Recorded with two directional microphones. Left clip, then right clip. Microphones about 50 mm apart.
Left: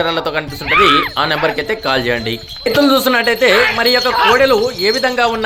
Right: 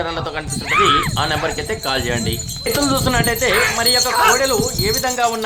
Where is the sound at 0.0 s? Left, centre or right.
Left.